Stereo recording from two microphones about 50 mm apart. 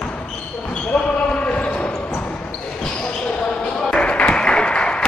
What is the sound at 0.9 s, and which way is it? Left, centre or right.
Basketball bounce, left.